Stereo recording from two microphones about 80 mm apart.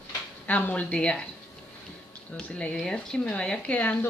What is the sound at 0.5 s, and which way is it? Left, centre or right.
Speech, centre.